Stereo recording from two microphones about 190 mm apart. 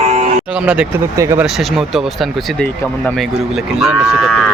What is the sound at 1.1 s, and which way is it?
Speech, 5° right (ahead or behind).